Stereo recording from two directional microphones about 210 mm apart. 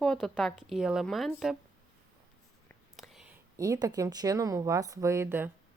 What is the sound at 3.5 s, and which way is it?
A woman's voice, 15° right (ahead or behind).